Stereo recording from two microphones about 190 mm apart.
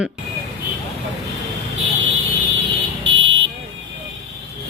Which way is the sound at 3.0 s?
75° right (ahead or behind).